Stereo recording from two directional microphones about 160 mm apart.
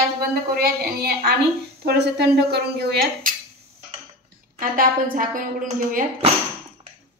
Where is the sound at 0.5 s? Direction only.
75° right (ahead or behind).